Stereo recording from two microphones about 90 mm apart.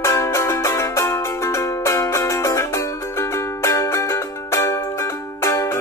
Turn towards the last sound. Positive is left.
turn(degrees=30)  # may be behind; listen again after turning